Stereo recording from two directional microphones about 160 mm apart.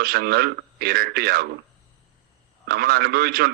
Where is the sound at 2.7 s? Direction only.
75° right (ahead or behind).